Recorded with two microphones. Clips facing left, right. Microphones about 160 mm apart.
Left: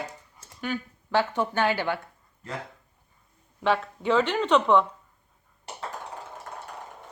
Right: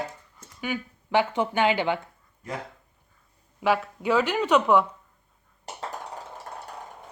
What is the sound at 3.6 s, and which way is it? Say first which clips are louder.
Speech: right 1 dB; 10° right (ahead or behind).